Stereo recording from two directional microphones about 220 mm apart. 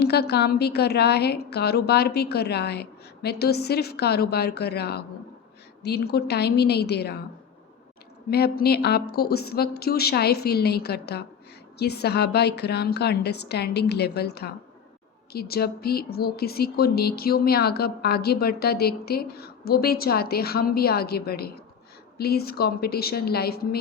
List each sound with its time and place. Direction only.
0.0 s speech: 45° left (ahead or behind)
8.3 s speech: 45° left (ahead or behind)